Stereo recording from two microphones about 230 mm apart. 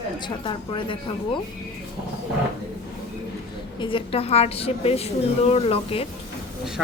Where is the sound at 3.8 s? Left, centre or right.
Left.